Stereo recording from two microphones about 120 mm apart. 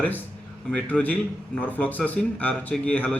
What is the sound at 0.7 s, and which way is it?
A man's voice, 10° left (ahead or behind).